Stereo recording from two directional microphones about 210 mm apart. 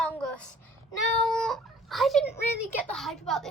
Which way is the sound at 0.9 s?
Centre (ahead or behind).